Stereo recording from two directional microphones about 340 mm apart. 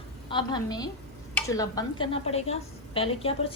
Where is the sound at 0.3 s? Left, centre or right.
Centre.